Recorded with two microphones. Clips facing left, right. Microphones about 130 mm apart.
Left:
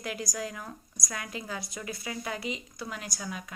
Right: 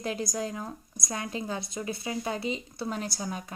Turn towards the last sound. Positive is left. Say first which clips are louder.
# right 4 dB
turn(degrees=-30)  # may be behind; listen again after turning